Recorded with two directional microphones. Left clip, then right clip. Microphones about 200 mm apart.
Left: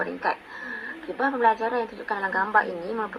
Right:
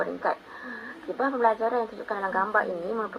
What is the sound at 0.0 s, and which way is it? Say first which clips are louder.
A woman's voice: left 1 dB; 30° left (ahead or behind).